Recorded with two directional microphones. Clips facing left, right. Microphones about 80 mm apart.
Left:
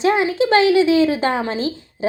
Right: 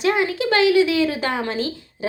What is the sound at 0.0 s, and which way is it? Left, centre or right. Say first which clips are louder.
Speech: left 3 dB; left.